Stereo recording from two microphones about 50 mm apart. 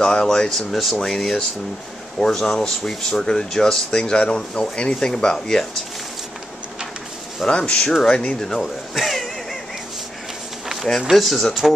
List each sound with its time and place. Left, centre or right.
0.0 s speech: centre
7.4 s speech: left
8.9 s a sound: centre
11.1 s speech: centre